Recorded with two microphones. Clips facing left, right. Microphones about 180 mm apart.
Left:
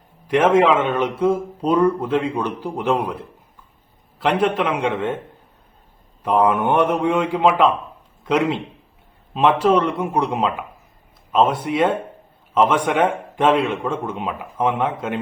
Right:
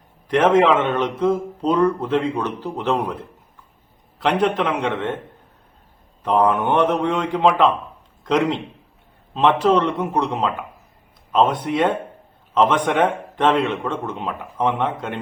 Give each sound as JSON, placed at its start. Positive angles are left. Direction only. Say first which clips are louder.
{"t": 0.3, "sound": "speech", "louder": "even", "side_deg": 5}
{"t": 4.2, "sound": "speech", "louder": "even", "side_deg": 5}
{"t": 6.2, "sound": "speech", "louder": "even", "side_deg": 10}